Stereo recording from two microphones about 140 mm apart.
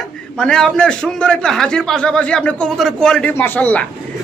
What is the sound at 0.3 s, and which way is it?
A man's voice, 5° left (ahead or behind).